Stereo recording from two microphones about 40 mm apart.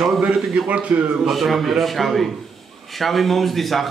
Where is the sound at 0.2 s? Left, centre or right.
Right.